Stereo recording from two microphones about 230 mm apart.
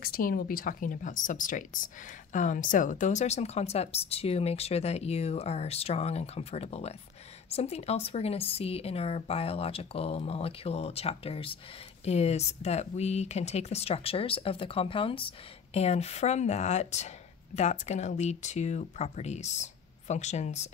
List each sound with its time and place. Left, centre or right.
0.0 s speech: left